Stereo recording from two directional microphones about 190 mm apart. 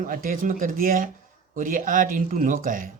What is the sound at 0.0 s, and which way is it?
Speech, 45° right (ahead or behind).